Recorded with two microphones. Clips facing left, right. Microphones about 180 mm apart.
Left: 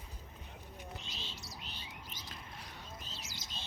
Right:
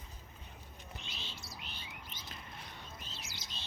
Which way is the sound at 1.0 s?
40° left (ahead or behind).